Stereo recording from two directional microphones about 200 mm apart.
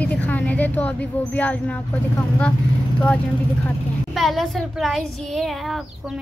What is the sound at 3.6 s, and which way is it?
Speech, centre (ahead or behind).